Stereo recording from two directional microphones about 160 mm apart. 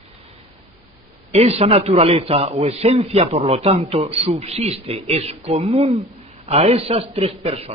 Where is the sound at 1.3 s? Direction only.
40° right (ahead or behind).